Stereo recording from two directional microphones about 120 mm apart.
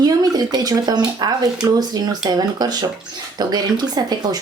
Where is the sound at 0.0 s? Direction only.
35° right (ahead or behind).